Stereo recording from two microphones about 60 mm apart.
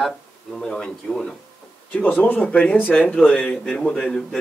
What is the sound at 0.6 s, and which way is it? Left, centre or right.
Speech, centre.